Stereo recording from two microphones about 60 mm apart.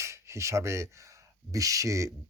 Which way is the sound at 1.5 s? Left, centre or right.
Right.